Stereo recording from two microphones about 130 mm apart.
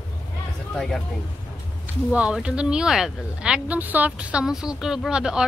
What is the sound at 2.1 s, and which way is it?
Speech, 5° right (ahead or behind).